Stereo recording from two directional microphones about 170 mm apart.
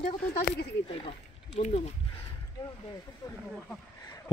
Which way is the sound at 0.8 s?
35° left (ahead or behind).